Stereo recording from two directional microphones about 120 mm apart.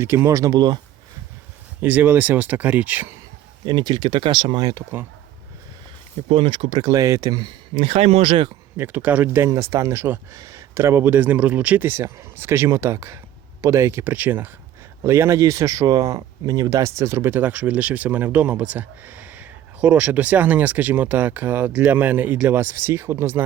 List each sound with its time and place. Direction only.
0.0 s speech: 20° right (ahead or behind)
1.8 s speech: 15° right (ahead or behind)
3.7 s speech: 35° right (ahead or behind)
4.7 s speech: 20° right (ahead or behind)
6.2 s speech: 45° right (ahead or behind)
7.7 s speech: 50° right (ahead or behind)
8.8 s speech: 15° right (ahead or behind)